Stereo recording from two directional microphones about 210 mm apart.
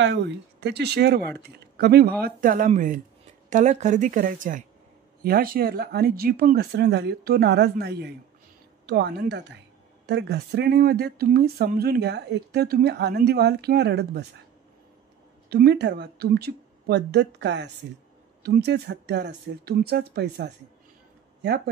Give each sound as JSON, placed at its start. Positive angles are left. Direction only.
{"t": 0.0, "sound": "a woman's voice", "side_deg": -55}
{"t": 15.5, "sound": "speech", "side_deg": -50}